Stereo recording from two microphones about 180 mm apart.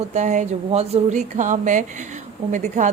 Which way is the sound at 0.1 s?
40° right (ahead or behind).